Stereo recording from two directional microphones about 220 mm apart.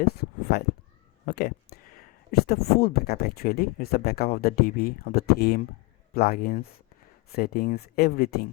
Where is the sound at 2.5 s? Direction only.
45° left (ahead or behind).